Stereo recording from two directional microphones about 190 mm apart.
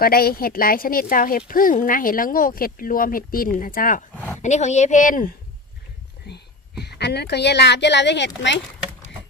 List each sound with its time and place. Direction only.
0.0 s speech: 50° left (ahead or behind)
6.2 s a woman's voice: 60° left (ahead or behind)